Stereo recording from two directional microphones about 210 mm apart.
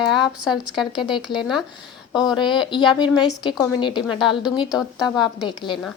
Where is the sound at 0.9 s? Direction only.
20° left (ahead or behind).